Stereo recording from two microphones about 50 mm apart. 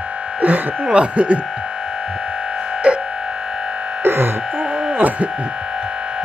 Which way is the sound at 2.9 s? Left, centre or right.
Right.